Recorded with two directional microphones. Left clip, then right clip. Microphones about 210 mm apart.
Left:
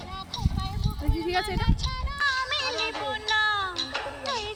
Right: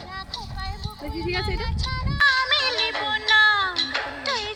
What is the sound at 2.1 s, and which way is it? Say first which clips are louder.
Music: right 7 dB; 10° right (ahead or behind).